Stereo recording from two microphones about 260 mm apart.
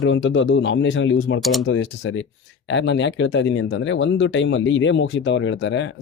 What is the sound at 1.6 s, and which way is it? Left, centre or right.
Speech, left.